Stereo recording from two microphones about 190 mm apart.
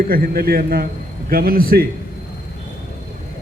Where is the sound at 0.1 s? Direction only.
55° right (ahead or behind).